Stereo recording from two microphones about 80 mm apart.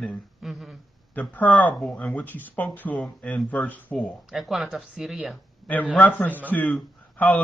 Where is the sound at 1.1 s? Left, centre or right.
Centre.